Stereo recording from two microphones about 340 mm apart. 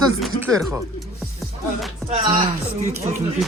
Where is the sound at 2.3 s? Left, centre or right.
Centre.